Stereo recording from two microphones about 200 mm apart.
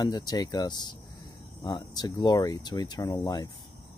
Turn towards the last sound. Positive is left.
turn(degrees=20)  # may be behind; listen again after turning